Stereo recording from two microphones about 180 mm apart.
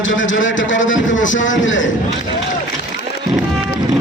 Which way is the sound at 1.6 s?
90° left.